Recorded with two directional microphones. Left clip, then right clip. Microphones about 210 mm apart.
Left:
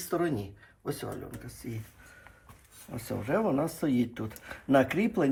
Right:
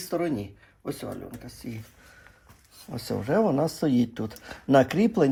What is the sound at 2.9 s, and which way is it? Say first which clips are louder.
Speech: right 4 dB; 40° right (ahead or behind).